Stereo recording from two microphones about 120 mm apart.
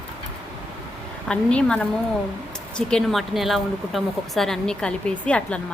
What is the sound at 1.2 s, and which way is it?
A woman's voice, 10° left (ahead or behind).